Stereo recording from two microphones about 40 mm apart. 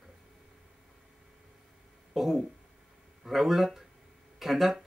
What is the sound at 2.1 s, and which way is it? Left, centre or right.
Speech, centre.